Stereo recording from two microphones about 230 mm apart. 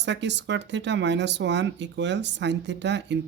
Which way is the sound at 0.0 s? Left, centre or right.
Right.